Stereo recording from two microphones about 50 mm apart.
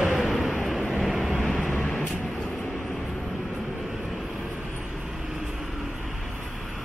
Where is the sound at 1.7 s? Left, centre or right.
Centre.